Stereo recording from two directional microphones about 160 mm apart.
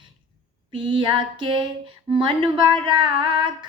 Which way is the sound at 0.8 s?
30° right (ahead or behind).